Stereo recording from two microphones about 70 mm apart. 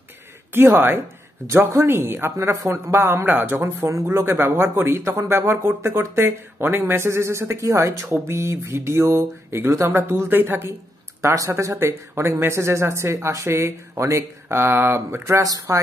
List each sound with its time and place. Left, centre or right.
0.5 s a man's voice: right
11.1 s a man's voice: right